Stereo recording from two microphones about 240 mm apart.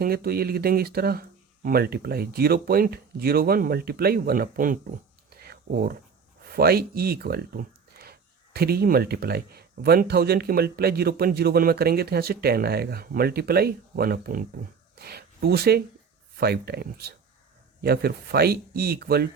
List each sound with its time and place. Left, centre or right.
0.0 s speech: right
5.4 s a sound: right
6.5 s speech: right